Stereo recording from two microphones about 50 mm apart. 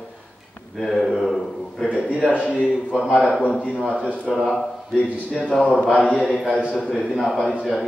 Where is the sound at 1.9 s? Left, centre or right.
Left.